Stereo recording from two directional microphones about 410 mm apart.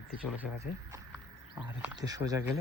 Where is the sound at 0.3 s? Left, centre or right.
Centre.